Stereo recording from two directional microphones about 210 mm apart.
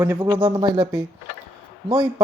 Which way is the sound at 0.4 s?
25° right (ahead or behind).